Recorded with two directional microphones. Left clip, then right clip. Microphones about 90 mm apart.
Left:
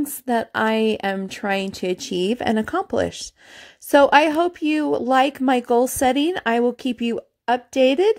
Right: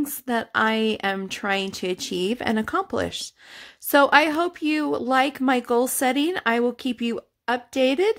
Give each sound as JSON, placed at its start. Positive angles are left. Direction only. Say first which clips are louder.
{"t": 0.0, "sound": "a woman's voice", "louder": "left 4 dB", "side_deg": 35}